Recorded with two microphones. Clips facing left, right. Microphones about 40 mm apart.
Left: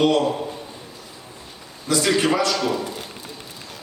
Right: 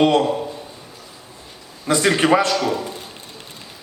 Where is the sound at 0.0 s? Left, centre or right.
Right.